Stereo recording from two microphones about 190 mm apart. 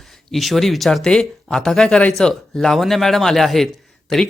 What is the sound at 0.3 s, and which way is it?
Speech, centre (ahead or behind).